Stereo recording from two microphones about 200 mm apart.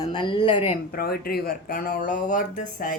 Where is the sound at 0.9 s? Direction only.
50° left (ahead or behind).